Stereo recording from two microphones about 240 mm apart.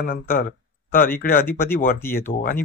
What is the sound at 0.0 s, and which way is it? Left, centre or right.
Speech, left.